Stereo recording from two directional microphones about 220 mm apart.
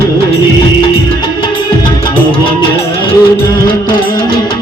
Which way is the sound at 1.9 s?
20° left (ahead or behind).